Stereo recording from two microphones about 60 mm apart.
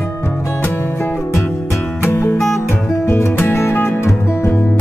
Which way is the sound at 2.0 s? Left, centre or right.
Left.